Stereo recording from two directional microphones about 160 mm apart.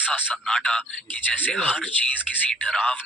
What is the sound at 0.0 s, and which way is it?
Speech, 10° left (ahead or behind).